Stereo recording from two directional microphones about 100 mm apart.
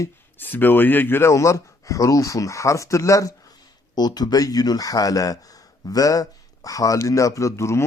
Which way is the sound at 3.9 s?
40° left (ahead or behind).